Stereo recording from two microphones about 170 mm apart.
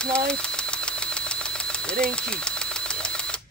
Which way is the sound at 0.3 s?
5° left (ahead or behind).